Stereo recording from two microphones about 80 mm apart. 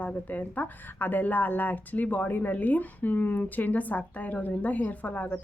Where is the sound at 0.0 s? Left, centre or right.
Centre.